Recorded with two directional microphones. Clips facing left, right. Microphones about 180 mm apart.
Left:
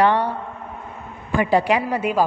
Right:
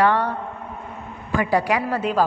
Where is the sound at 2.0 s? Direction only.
10° left (ahead or behind).